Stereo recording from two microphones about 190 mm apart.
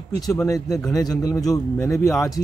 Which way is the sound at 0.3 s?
15° left (ahead or behind).